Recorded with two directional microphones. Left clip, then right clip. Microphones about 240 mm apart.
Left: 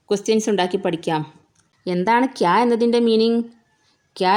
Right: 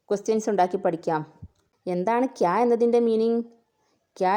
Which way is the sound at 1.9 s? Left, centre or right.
Centre.